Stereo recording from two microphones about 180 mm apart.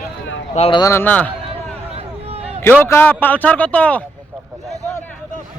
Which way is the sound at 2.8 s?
10° left (ahead or behind).